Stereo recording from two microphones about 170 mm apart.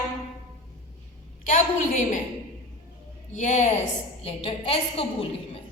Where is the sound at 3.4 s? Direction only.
45° left (ahead or behind).